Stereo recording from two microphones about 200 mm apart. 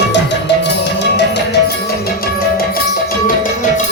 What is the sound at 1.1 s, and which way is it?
Music, 60° left (ahead or behind).